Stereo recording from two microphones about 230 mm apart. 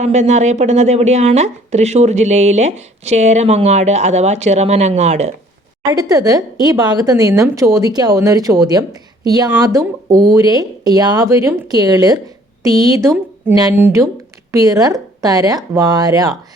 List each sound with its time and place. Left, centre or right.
0.0 s a woman's voice: right
5.9 s speech: centre